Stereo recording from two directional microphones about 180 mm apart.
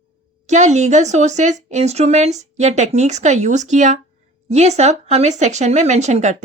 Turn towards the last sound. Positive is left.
turn(degrees=-40)  # may be behind; listen again after turning